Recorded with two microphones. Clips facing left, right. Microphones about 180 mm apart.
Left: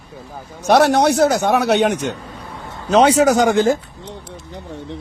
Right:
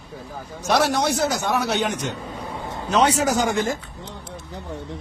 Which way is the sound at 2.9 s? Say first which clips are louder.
Left 7 dB; 80° left.